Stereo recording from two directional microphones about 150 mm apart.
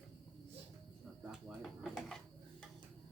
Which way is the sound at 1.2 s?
5° right (ahead or behind).